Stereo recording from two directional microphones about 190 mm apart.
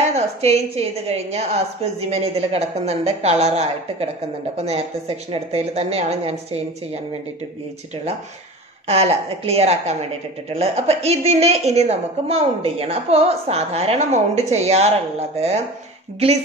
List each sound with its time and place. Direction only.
0.1 s a woman's voice: 35° right (ahead or behind)
8.8 s a woman's voice: 35° right (ahead or behind)